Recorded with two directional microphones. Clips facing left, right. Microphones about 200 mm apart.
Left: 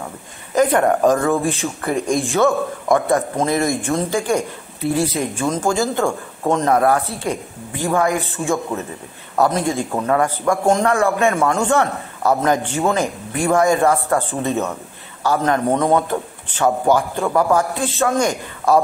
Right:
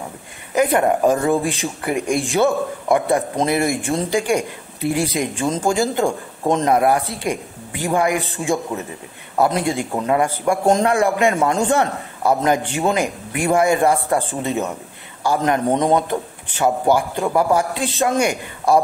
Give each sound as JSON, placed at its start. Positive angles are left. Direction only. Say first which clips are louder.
{"t": 0.6, "sound": "a man's voice", "louder": "left 1 dB", "side_deg": -10}
{"t": 15.2, "sound": "a man's voice", "louder": "even", "side_deg": -15}